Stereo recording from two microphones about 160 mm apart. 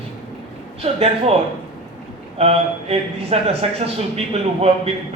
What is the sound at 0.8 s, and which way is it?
Speech, 40° right (ahead or behind).